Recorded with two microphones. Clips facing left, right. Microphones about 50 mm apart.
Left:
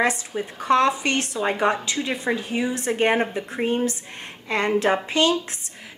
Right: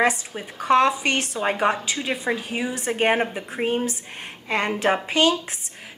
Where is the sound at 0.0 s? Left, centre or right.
Centre.